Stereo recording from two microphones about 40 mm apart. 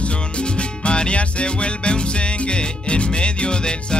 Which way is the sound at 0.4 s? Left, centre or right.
Left.